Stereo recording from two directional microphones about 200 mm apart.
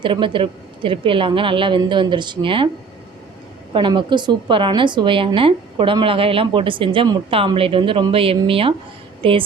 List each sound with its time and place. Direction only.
0.0 s a woman's voice: 25° right (ahead or behind)
3.7 s a woman's voice: 25° right (ahead or behind)